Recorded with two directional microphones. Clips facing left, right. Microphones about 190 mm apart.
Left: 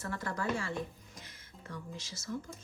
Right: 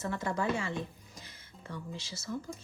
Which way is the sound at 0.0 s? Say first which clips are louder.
Right 4 dB; 20° right (ahead or behind).